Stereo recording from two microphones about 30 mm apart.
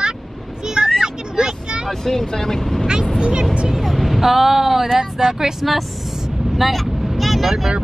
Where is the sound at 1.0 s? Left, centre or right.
Centre.